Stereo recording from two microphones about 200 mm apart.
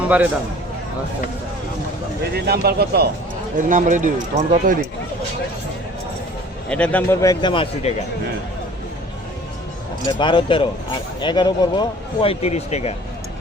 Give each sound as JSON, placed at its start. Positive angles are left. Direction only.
{"t": 0.0, "sound": "a man's voice", "side_deg": -5}
{"t": 2.3, "sound": "speech", "side_deg": -50}
{"t": 3.6, "sound": "speech", "side_deg": -40}
{"t": 6.7, "sound": "a man's voice", "side_deg": 5}
{"t": 10.1, "sound": "speech", "side_deg": 25}